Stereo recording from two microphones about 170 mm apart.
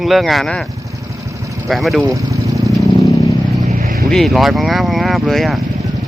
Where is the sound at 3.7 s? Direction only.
50° right (ahead or behind).